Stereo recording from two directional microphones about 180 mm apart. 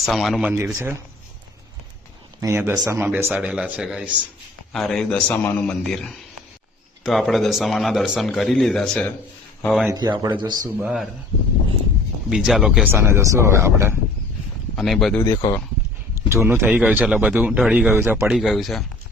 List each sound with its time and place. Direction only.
0.0 s speech: centre (ahead or behind)
0.5 s speech: 15° right (ahead or behind)
2.4 s speech: 15° right (ahead or behind); by 9.9 s centre (ahead or behind)
9.9 s speech: 20° right (ahead or behind)
10.8 s speech: 5° right (ahead or behind)
12.3 s speech: 5° right (ahead or behind)
12.9 s speech: 15° right (ahead or behind)
14.8 s speech: centre (ahead or behind)
15.2 s speech: 20° left (ahead or behind)
16.3 s speech: 15° right (ahead or behind)